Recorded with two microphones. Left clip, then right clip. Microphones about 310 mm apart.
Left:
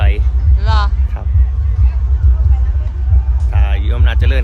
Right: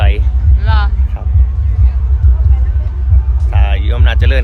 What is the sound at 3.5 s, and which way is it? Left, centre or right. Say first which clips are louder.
Speech: right 4 dB; centre.